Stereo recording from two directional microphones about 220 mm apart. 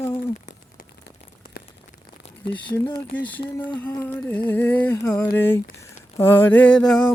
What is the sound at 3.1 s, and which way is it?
Mantra, 5° left (ahead or behind).